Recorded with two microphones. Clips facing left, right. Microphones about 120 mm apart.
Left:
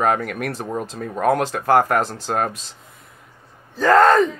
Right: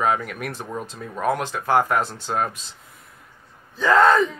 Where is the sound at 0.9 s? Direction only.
50° left (ahead or behind).